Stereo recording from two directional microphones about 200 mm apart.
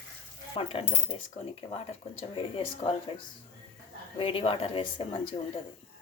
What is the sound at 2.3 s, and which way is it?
Speech, 25° left (ahead or behind).